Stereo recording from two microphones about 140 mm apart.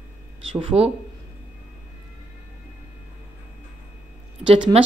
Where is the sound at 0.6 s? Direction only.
40° right (ahead or behind).